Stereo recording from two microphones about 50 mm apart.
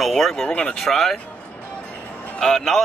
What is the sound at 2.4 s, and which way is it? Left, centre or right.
Speech, centre.